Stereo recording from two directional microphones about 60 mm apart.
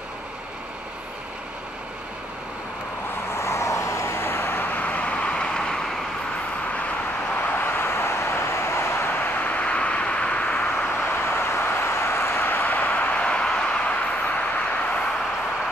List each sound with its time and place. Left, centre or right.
3.3 s vehicle: left; by 5.9 s centre
7.3 s vehicle: left
10.7 s vehicle: left